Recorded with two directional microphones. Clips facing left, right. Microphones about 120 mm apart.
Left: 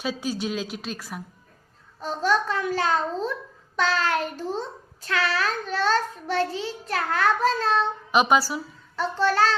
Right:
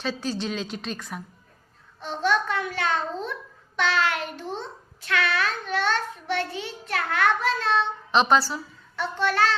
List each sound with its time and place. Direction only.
0.0 s a woman's voice: 10° left (ahead or behind)
2.0 s child singing: 40° left (ahead or behind)
8.1 s a woman's voice: 10° left (ahead or behind)
9.0 s child singing: 35° left (ahead or behind)